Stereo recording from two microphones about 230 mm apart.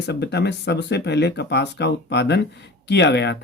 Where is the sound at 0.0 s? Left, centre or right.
Left.